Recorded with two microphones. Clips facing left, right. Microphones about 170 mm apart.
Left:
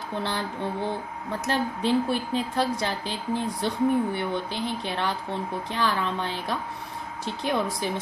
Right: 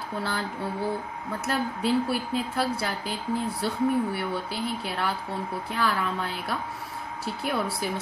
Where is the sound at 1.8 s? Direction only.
5° right (ahead or behind).